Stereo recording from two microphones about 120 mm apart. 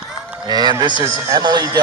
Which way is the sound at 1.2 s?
35° right (ahead or behind).